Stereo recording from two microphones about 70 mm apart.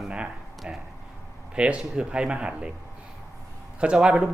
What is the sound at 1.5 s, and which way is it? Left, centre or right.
Speech, centre.